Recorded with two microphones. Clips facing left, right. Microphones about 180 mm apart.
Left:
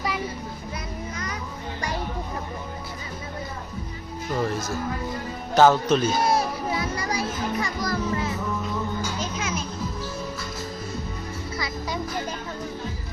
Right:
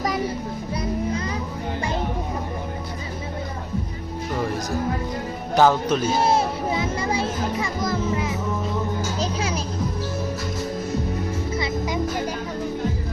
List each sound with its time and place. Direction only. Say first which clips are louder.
0.7 s music: right 12 dB; 30° right (ahead or behind)
5.5 s speech: left 1 dB; 10° right (ahead or behind)
6.1 s music: right 3 dB; 25° right (ahead or behind)
9.0 s children playing: right 4 dB; 35° right (ahead or behind)
11.5 s music: right 4 dB; 25° right (ahead or behind)